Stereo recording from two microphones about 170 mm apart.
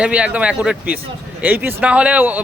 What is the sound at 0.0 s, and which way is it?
Speech, 5° right (ahead or behind).